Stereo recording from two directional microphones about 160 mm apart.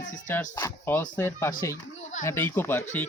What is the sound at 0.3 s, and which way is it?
Speech, 15° left (ahead or behind).